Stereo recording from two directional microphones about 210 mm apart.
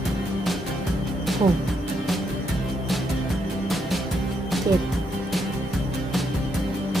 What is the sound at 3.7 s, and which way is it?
Music, centre (ahead or behind).